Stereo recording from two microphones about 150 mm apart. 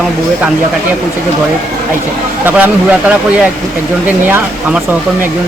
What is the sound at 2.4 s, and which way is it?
Speech, 10° right (ahead or behind).